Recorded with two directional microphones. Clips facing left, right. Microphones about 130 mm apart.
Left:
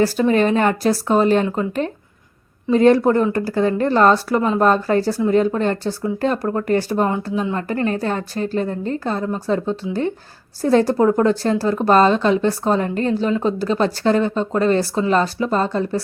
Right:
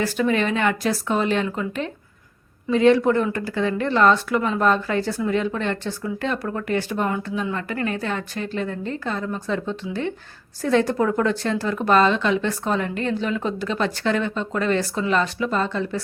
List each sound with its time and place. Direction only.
0.0 s speech: 35° left (ahead or behind)